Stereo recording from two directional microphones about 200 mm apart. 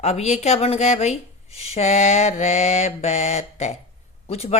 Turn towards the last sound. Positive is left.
turn(degrees=30)  # may be behind; listen again after turning